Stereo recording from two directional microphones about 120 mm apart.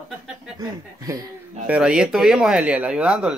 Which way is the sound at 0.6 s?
35° right (ahead or behind).